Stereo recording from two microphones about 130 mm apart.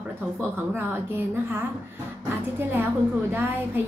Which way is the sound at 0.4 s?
20° right (ahead or behind).